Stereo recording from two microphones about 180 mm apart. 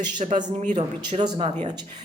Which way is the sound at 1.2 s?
25° right (ahead or behind).